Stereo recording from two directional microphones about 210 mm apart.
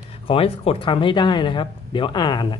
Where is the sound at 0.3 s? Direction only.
25° left (ahead or behind).